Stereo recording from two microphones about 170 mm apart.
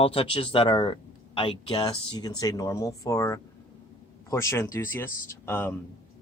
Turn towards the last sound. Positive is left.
turn(degrees=10)  # may be behind; listen again after turning